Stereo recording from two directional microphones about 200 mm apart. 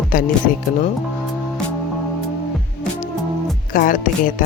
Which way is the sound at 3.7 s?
45° left (ahead or behind).